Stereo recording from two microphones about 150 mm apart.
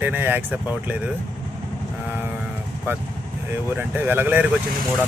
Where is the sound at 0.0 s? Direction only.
15° right (ahead or behind).